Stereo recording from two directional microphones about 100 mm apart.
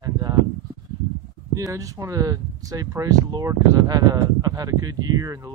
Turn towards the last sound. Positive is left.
turn(degrees=-35)  # may be behind; listen again after turning